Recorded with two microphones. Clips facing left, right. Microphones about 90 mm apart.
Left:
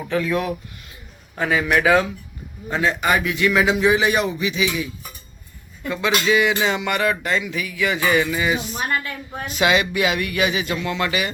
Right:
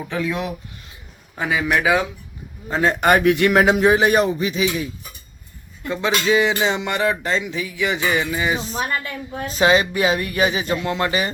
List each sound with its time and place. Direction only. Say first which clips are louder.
0.1 s a man's voice: left 3 dB; 15° right (ahead or behind)
2.8 s a man's voice: right 5 dB; 50° right (ahead or behind)
5.9 s speech: right 1 dB; 25° right (ahead or behind)
9.6 s speech: right 2 dB; 35° right (ahead or behind)